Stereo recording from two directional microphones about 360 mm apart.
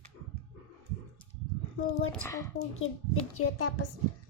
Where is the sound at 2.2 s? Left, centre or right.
Centre.